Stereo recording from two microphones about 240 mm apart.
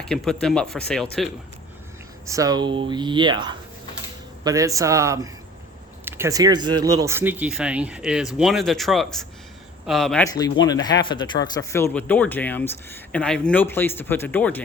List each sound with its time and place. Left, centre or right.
0.0 s speech: centre
2.2 s a man's voice: centre
10.2 s speech: centre